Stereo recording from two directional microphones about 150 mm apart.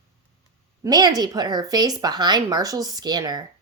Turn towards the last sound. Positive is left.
turn(degrees=-25)  # may be behind; listen again after turning